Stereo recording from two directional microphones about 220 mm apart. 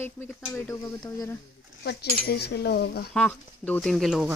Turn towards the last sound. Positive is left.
turn(degrees=0)  # may be behind; listen again after turning